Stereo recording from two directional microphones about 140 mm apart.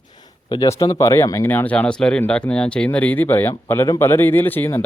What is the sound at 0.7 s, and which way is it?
Speech, 20° left (ahead or behind).